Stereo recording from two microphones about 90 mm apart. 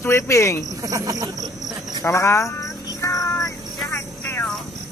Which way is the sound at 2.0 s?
30° left (ahead or behind).